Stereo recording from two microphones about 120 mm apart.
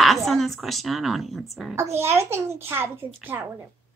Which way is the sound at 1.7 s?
20° right (ahead or behind).